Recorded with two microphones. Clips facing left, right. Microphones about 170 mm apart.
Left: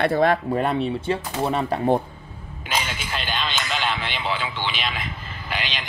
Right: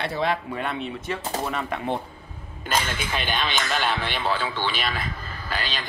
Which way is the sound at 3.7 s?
15° left (ahead or behind).